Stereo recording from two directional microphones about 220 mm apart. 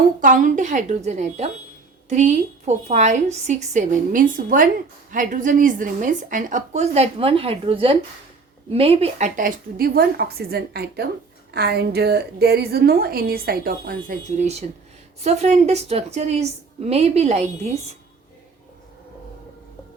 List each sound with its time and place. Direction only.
0.2 s a woman's voice: 35° right (ahead or behind)